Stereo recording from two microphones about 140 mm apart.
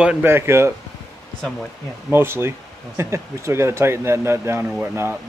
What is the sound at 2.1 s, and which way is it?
Speech, 15° right (ahead or behind).